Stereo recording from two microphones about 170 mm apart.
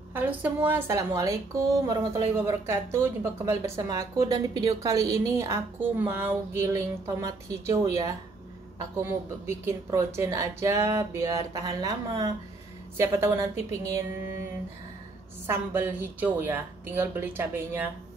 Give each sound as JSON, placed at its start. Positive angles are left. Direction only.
{"t": 0.1, "sound": "a woman's voice", "side_deg": -10}